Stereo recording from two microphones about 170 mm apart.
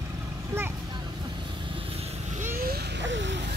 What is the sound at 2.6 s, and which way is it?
Vehicle, 80° right.